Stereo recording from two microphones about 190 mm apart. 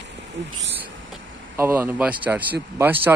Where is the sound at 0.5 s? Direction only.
70° right (ahead or behind).